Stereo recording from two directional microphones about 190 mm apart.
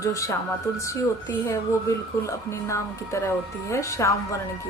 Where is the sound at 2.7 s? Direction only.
15° left (ahead or behind).